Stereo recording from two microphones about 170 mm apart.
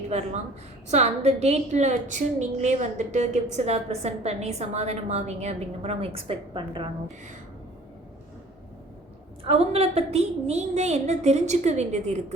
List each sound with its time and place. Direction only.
0.1 s a woman's voice: 40° right (ahead or behind)
9.4 s a woman's voice: 35° right (ahead or behind)